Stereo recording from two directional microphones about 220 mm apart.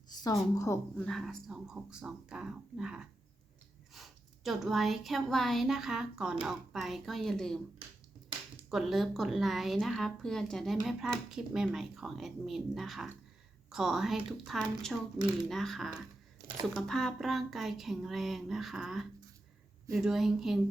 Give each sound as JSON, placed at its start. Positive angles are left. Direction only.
{"t": 0.1, "sound": "a sound", "side_deg": 20}
{"t": 0.5, "sound": "a woman's voice", "side_deg": 15}
{"t": 1.0, "sound": "speech", "side_deg": 0}
{"t": 8.7, "sound": "a woman's voice", "side_deg": 0}
{"t": 16.4, "sound": "a sound", "side_deg": -40}
{"t": 16.7, "sound": "speech", "side_deg": 0}